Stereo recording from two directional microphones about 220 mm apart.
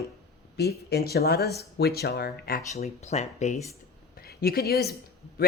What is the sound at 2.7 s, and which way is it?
Speech, 30° left (ahead or behind).